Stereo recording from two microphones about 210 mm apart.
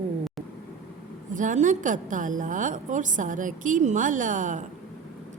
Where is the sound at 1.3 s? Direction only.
35° right (ahead or behind).